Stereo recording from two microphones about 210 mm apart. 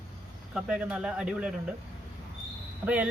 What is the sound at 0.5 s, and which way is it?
Speech, 5° right (ahead or behind).